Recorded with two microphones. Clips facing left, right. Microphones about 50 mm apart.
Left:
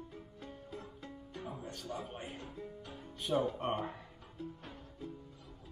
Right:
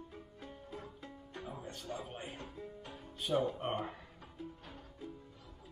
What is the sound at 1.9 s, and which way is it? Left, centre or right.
Speech, right.